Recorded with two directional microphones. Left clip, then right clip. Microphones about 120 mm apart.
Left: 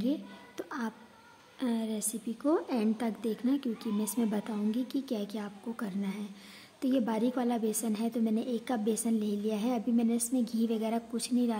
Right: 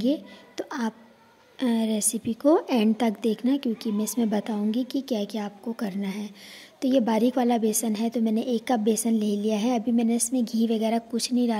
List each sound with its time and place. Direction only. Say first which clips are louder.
0.0 s a woman's voice: right 8 dB; 30° right (ahead or behind)